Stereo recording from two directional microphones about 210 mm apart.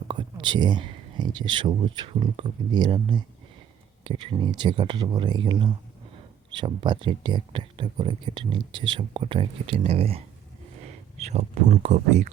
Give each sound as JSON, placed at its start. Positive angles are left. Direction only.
{"t": 0.1, "sound": "speech", "side_deg": -25}